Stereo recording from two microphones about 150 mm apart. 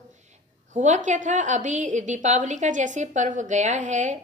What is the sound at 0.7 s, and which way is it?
A woman's voice, 55° right (ahead or behind).